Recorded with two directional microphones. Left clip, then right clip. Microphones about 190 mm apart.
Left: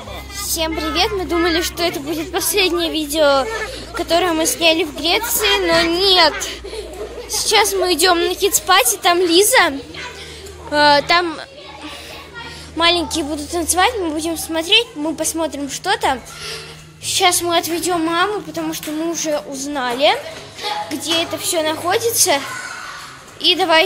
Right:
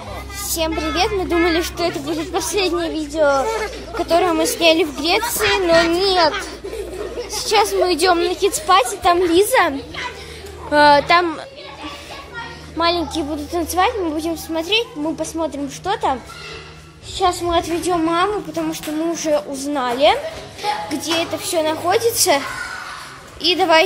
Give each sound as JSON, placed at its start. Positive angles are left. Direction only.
{"t": 0.6, "sound": "a woman's voice", "side_deg": 0}
{"t": 3.9, "sound": "a woman's voice", "side_deg": 0}
{"t": 7.4, "sound": "a woman's voice", "side_deg": 0}
{"t": 12.7, "sound": "a woman's voice", "side_deg": 5}
{"t": 17.2, "sound": "a woman's voice", "side_deg": 5}
{"t": 23.4, "sound": "a woman's voice", "side_deg": -5}